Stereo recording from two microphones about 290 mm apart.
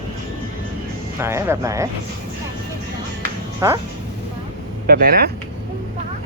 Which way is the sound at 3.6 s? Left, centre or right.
Centre.